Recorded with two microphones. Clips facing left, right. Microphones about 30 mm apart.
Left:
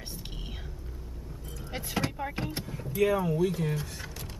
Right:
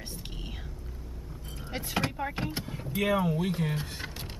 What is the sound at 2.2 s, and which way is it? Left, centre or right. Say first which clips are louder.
Speech: right 1 dB; centre.